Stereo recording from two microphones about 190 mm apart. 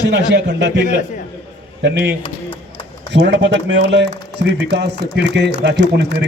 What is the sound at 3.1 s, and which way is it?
A man's voice, 65° right (ahead or behind).